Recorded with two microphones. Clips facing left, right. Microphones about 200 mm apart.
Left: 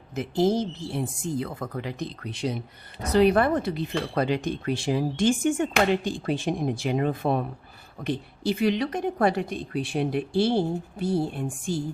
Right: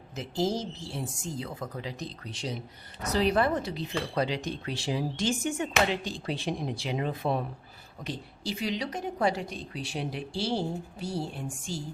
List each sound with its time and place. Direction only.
0.1 s a woman's voice: 55° left (ahead or behind)